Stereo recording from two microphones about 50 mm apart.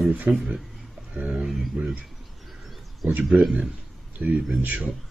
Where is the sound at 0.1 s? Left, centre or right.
Right.